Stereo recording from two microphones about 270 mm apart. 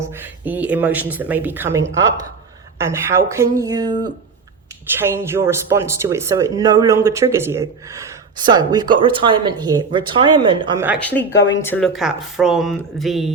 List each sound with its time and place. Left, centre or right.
0.0 s speech: centre
10.8 s speech: centre